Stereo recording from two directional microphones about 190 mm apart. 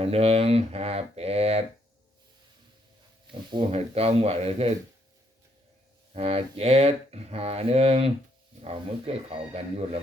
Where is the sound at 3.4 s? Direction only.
25° right (ahead or behind).